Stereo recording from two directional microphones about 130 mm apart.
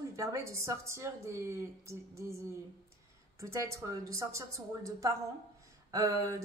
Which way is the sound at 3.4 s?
25° right (ahead or behind).